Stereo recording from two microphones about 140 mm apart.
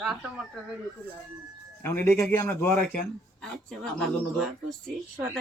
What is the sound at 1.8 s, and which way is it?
Speech, 15° left (ahead or behind).